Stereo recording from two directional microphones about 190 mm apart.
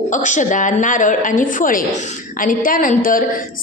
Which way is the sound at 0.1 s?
40° left (ahead or behind).